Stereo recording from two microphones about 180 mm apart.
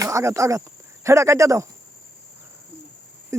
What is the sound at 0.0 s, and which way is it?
Speech, 15° right (ahead or behind).